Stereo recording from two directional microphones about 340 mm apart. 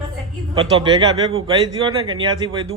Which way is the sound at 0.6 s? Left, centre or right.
Centre.